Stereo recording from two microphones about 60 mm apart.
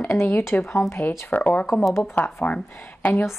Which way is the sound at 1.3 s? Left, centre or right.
Left.